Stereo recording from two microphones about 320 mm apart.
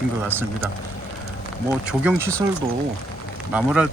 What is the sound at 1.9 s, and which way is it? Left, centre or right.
Speech, centre.